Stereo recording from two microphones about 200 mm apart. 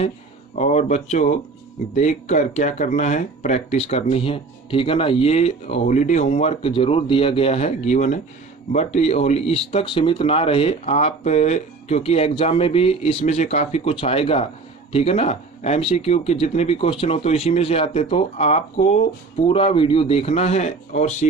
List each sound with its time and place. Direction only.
0.5 s speech: 35° left (ahead or behind)